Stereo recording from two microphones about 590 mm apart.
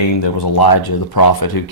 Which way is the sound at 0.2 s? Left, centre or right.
Left.